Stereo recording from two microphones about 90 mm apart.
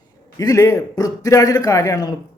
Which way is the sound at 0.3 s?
40° left (ahead or behind).